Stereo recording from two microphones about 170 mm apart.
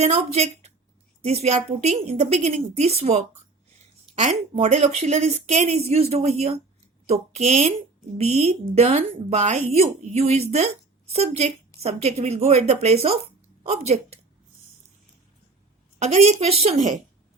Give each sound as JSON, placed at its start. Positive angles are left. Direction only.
{"t": 0.0, "sound": "speech", "side_deg": -40}
{"t": 16.0, "sound": "speech", "side_deg": -40}